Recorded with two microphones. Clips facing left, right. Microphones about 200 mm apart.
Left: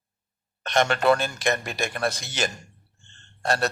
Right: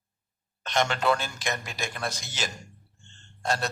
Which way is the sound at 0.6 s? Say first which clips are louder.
Left 4 dB; 60° left (ahead or behind).